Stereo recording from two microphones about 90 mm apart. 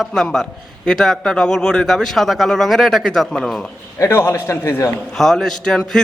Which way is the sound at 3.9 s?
30° left (ahead or behind).